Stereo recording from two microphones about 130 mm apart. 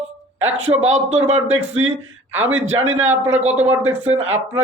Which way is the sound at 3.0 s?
15° right (ahead or behind).